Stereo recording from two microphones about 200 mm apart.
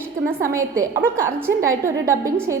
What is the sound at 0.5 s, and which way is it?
A woman's voice, 15° right (ahead or behind).